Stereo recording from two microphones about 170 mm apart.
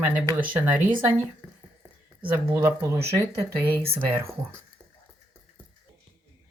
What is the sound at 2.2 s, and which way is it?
Speech, 10° right (ahead or behind).